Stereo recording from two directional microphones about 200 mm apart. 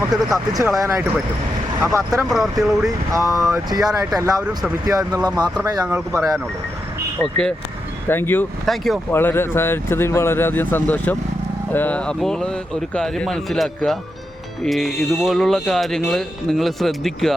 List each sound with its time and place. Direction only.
0.5 s speech: 15° right (ahead or behind)
2.3 s speech: centre (ahead or behind)
3.1 s speech: 15° right (ahead or behind)
7.2 s speech: 5° left (ahead or behind)
9.1 s speech: 10° left (ahead or behind)